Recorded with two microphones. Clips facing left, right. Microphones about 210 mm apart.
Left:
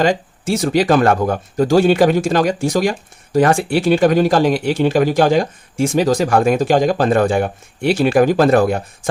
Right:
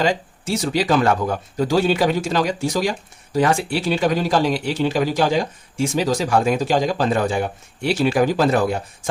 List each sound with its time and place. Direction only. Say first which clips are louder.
0.0 s speech: left 4 dB; 50° left (ahead or behind)